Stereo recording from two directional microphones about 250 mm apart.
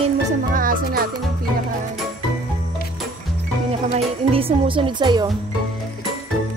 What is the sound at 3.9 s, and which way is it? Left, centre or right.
A woman's voice, right.